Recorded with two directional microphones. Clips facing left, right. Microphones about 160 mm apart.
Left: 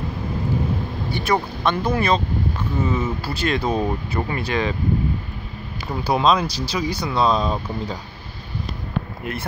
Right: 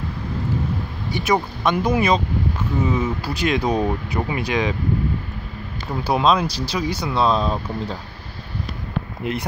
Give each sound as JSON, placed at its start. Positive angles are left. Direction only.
{"t": 1.1, "sound": "speech", "side_deg": -10}
{"t": 6.0, "sound": "speech", "side_deg": -5}
{"t": 6.5, "sound": "speech", "side_deg": 10}
{"t": 6.9, "sound": "speech", "side_deg": -10}
{"t": 9.2, "sound": "speech", "side_deg": -20}